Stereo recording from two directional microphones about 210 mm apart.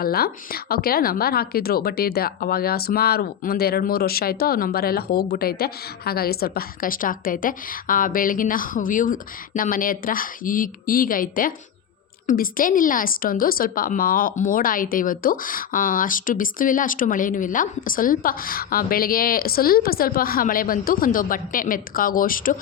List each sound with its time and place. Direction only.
0.0 s a woman's voice: 45° left (ahead or behind)